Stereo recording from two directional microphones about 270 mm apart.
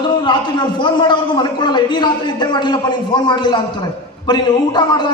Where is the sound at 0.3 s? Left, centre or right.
Centre.